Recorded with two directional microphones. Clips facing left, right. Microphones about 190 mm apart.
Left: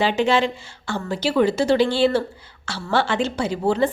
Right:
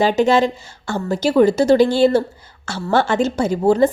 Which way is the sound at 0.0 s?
45° right (ahead or behind).